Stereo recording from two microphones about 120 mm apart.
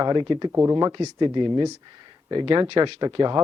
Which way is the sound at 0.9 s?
35° right (ahead or behind).